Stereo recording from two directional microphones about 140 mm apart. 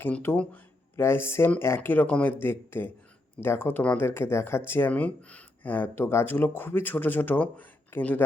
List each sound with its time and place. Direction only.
0.0 s speech: 15° left (ahead or behind)